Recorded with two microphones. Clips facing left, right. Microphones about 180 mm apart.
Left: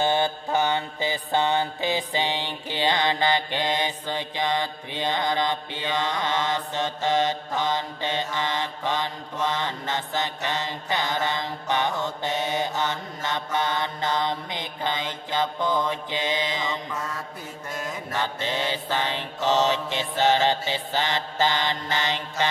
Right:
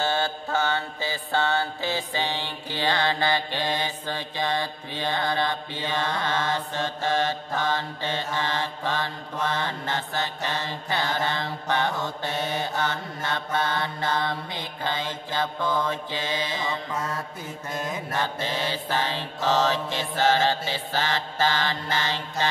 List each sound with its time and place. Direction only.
0.0 s mantra: 15° left (ahead or behind)
18.2 s mantra: 20° left (ahead or behind)